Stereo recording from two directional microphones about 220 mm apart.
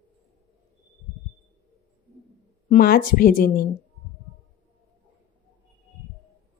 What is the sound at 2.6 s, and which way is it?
Speech, 40° left (ahead or behind).